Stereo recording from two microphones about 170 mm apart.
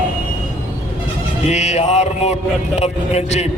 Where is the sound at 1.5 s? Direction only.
40° left (ahead or behind).